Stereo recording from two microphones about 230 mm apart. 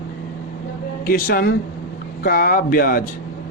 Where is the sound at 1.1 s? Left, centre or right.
Left.